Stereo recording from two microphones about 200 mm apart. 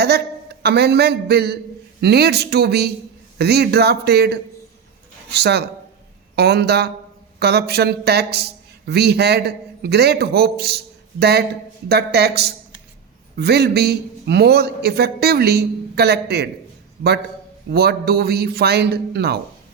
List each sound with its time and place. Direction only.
0.0 s a man's voice: 55° right (ahead or behind)
17.7 s speech: 55° right (ahead or behind)